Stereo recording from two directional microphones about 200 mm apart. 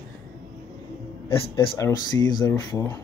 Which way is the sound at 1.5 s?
15° left (ahead or behind).